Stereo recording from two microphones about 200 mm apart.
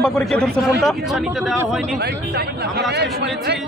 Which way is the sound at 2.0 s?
55° right (ahead or behind).